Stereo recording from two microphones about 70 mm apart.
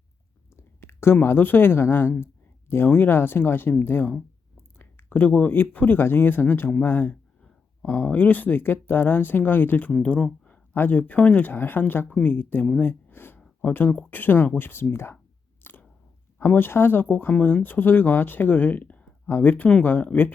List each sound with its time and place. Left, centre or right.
0.5 s speech: left; by 10.5 s centre
10.5 s speech: left
12.8 s a sound: left
14.1 s speech: left
15.6 s chewing: left
16.6 s speech: left